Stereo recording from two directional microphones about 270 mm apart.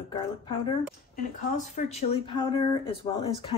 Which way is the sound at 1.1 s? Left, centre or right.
Left.